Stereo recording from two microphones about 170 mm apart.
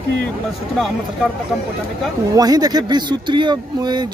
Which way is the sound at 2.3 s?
25° right (ahead or behind).